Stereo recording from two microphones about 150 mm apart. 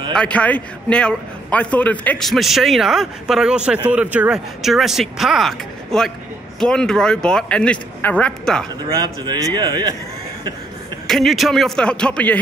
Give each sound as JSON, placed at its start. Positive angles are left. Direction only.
{"t": 0.1, "sound": "a man's voice", "side_deg": 10}
{"t": 8.9, "sound": "a man's voice", "side_deg": -30}
{"t": 11.1, "sound": "a man's voice", "side_deg": 0}